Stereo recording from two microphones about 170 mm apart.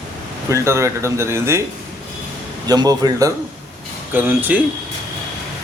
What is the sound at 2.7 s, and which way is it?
Speech, 20° right (ahead or behind).